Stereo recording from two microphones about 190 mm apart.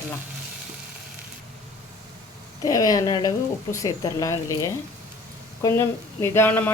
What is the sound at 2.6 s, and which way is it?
Speech, 20° left (ahead or behind).